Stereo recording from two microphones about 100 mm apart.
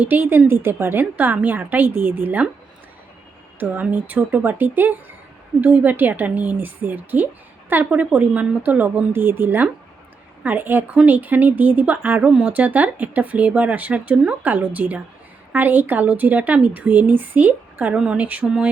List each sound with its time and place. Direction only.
0.0 s a woman's voice: 20° right (ahead or behind)
3.6 s a woman's voice: 20° right (ahead or behind)